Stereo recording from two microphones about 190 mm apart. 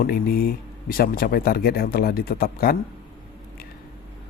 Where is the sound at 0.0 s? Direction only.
50° left (ahead or behind).